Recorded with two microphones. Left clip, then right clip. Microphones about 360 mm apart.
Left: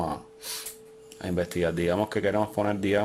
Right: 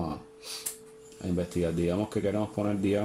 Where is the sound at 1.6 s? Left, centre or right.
Left.